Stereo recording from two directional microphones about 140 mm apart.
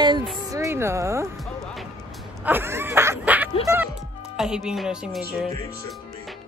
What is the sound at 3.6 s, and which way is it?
Speech, 15° right (ahead or behind).